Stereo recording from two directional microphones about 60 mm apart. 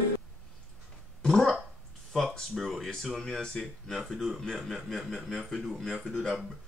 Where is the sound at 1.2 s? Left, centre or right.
Centre.